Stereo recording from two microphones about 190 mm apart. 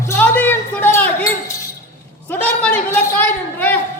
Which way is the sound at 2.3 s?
10° left (ahead or behind).